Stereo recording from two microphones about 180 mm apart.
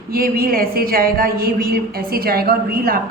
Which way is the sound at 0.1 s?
55° right (ahead or behind).